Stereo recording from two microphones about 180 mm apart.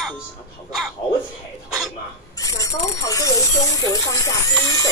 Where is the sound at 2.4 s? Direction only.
20° left (ahead or behind).